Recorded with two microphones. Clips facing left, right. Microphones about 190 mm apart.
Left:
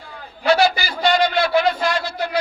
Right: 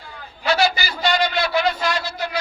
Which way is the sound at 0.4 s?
50° left (ahead or behind).